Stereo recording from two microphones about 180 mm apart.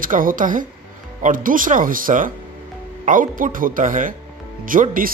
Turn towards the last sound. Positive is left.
turn(degrees=-50)  # may be behind; listen again after turning